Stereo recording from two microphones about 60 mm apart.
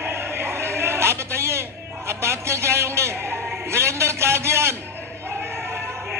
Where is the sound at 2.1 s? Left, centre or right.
Right.